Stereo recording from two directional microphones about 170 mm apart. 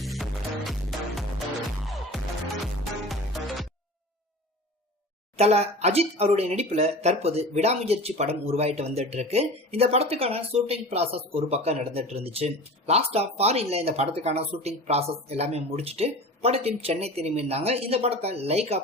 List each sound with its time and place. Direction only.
0.0 s music: centre (ahead or behind)
3.1 s music: centre (ahead or behind)
5.4 s speech: 40° right (ahead or behind)